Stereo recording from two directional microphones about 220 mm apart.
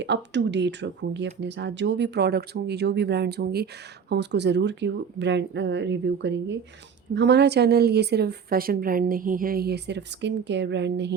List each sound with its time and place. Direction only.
0.0 s speech: 55° right (ahead or behind)